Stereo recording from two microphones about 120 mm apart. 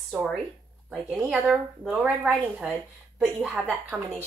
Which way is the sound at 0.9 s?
5° right (ahead or behind).